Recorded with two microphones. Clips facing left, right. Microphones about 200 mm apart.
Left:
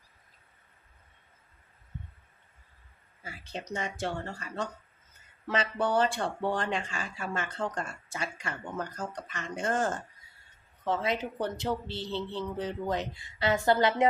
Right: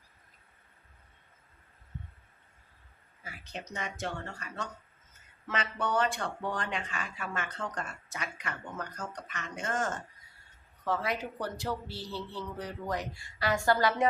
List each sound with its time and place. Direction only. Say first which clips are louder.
3.4 s a man's voice: left 4 dB; 30° left (ahead or behind)